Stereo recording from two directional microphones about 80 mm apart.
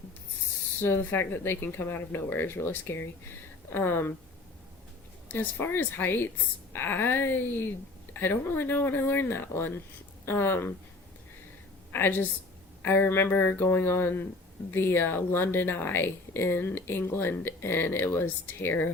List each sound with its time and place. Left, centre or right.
0.8 s speech: left
5.3 s speech: left
11.9 s a woman's voice: left